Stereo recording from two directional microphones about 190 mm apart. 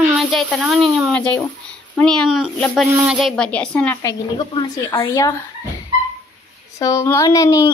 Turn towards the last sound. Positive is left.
turn(degrees=15)  # may be behind; listen again after turning